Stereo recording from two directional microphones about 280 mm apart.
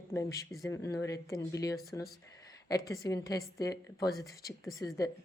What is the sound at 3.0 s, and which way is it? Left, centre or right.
A woman's voice, centre.